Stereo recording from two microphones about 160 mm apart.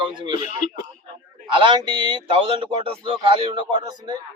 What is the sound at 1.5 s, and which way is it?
A man's voice, 30° right (ahead or behind).